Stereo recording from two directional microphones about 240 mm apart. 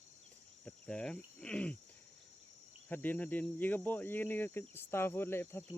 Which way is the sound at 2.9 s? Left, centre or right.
Centre.